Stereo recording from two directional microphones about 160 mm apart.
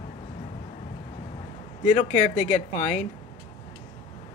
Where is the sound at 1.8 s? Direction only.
45° left (ahead or behind).